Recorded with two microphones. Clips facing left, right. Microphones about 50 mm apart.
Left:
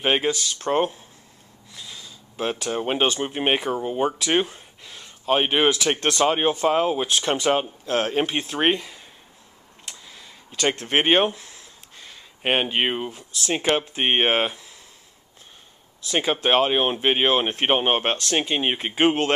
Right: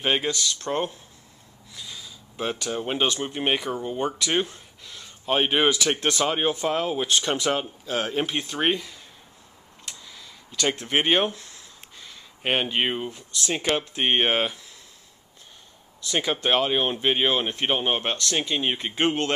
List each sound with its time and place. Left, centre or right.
0.0 s speech: centre
1.7 s a sound: centre
2.8 s speech: centre
4.5 s a sound: centre
6.2 s speech: centre
10.0 s a sound: centre
10.8 s speech: centre
12.0 s a sound: centre
13.5 s speech: centre
16.4 s speech: centre
17.6 s speech: left
18.1 s speech: centre